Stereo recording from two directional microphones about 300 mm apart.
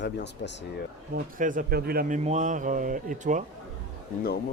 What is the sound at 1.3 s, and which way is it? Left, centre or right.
A man's voice, right.